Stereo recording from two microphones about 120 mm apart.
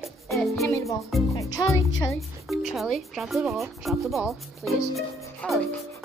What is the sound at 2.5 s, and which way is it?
A woman's voice, centre (ahead or behind).